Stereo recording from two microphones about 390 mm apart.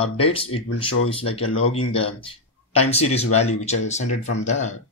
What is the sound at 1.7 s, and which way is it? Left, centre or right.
Speech, centre.